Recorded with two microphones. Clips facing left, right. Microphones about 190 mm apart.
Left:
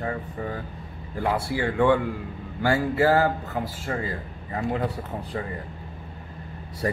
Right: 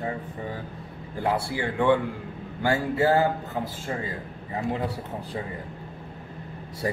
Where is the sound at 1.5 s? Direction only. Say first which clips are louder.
Left 3 dB; 20° right (ahead or behind).